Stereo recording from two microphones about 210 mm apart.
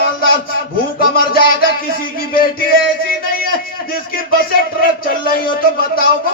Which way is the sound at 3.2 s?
45° left (ahead or behind).